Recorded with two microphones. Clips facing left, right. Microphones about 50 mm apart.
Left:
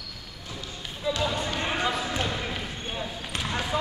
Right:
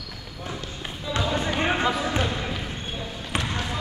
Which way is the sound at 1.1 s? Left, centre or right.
Right.